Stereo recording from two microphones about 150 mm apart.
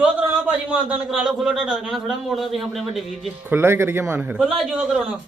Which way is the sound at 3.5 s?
15° right (ahead or behind).